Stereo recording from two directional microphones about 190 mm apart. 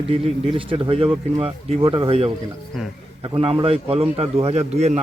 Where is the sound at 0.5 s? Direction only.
30° right (ahead or behind).